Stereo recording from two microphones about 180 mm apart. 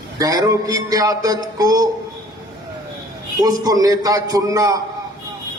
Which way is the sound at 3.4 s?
20° right (ahead or behind).